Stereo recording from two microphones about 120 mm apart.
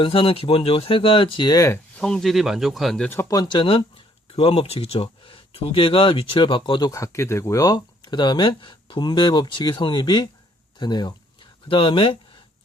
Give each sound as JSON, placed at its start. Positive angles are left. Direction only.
{"t": 0.0, "sound": "speech", "side_deg": 50}
{"t": 2.0, "sound": "speech", "side_deg": 5}
{"t": 3.2, "sound": "speech", "side_deg": 35}
{"t": 10.8, "sound": "a sound", "side_deg": 35}